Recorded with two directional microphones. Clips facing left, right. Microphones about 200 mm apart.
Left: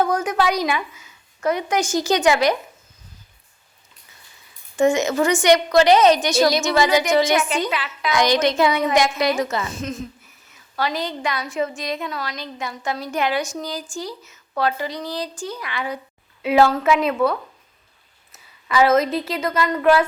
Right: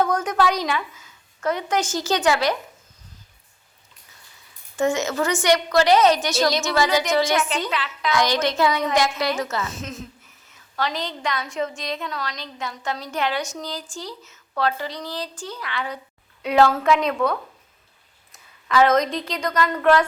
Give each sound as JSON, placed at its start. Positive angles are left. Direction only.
{"t": 0.0, "sound": "a woman's voice", "side_deg": 10}
{"t": 4.8, "sound": "a woman's voice", "side_deg": 15}
{"t": 9.7, "sound": "a woman's voice", "side_deg": 0}